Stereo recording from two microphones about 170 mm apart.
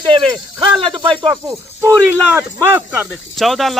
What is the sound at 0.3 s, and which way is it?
Speech, 30° right (ahead or behind).